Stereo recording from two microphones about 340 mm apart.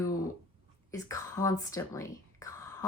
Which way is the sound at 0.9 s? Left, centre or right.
Centre.